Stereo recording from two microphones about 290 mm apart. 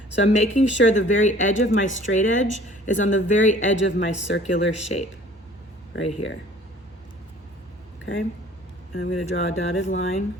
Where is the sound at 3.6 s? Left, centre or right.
Left.